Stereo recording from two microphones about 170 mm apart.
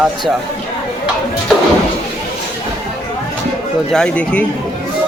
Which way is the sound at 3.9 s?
5° left (ahead or behind).